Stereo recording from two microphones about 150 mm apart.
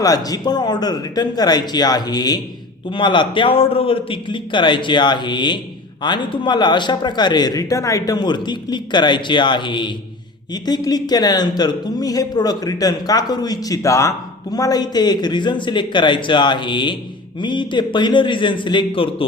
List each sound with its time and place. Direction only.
0.0 s a man's voice: 25° left (ahead or behind)